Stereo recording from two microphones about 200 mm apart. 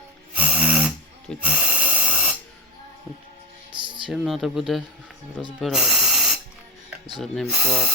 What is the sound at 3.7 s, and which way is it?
Music, 25° right (ahead or behind).